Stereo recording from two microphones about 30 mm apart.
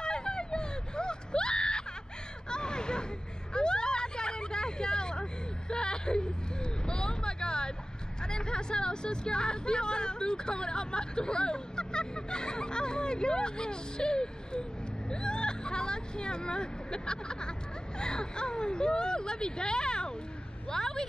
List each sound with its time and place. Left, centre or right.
0.0 s a sound: left
3.5 s vehicle: left
8.2 s speech: left